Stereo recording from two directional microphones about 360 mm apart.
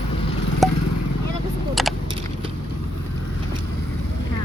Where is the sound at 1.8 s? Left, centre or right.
Centre.